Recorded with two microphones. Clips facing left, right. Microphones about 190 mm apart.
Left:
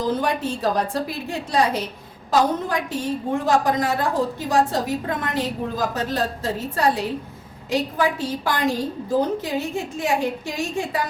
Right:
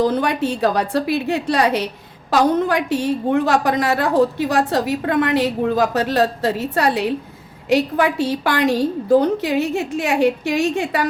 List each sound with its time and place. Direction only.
0.0 s a woman's voice: 70° right (ahead or behind)